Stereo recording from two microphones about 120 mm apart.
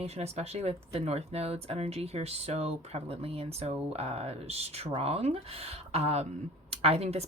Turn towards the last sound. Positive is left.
turn(degrees=-60)  # may be behind; listen again after turning